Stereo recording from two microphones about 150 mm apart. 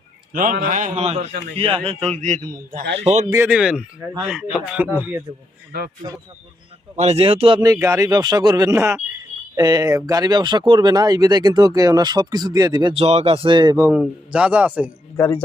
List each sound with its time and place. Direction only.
0.3 s a man's voice: 65° right (ahead or behind); by 3.2 s 45° right (ahead or behind)
3.3 s a man's voice: 10° right (ahead or behind)
6.9 s speech: 45° right (ahead or behind)
7.6 s speech: 20° right (ahead or behind)
12.9 s speech: 45° right (ahead or behind)
13.9 s a man's voice: 5° right (ahead or behind)